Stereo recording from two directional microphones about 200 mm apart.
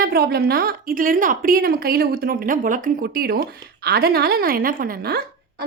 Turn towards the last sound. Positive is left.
turn(degrees=-50)  # may be behind; listen again after turning